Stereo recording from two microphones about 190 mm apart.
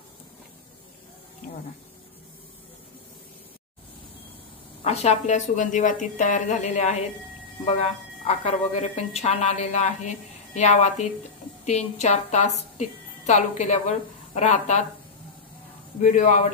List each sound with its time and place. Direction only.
4.8 s a woman's voice: 35° left (ahead or behind)
16.0 s a woman's voice: 40° left (ahead or behind)